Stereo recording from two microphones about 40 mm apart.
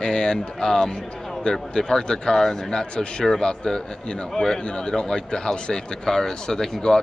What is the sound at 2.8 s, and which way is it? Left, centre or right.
Speech, left.